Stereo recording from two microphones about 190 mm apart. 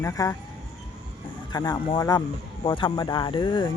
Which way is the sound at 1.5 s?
20° left (ahead or behind).